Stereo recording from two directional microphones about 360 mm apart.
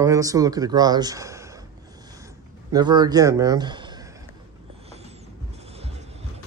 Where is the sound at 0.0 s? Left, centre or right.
Centre.